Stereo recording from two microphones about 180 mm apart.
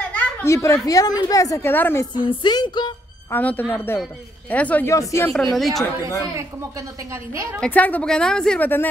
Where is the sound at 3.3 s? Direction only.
10° left (ahead or behind).